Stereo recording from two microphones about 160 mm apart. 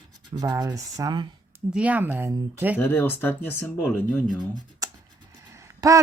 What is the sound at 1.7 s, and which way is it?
Speech, 10° right (ahead or behind).